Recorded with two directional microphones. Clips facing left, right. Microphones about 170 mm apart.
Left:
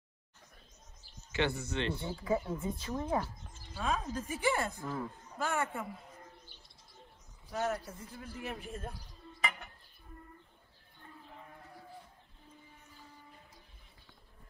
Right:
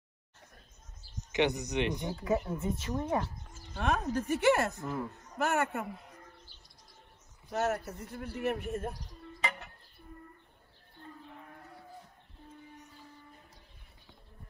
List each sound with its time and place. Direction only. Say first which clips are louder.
1.3 s speech: right 4 dB; 15° right (ahead or behind)
3.7 s a woman's voice: right 4 dB; 65° right (ahead or behind)
7.5 s speech: right 3 dB; 65° right (ahead or behind)